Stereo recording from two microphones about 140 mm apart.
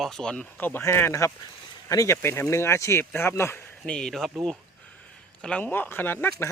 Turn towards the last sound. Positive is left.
turn(degrees=15)  # may be behind; listen again after turning